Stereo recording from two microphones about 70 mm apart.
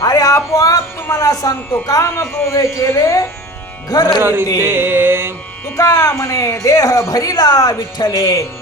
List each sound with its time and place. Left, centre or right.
0.0 s a woman's voice: left
3.8 s speech: left
4.2 s music: right
5.7 s a woman's voice: left